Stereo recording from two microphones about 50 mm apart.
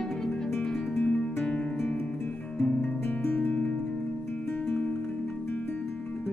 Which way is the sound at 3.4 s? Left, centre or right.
Left.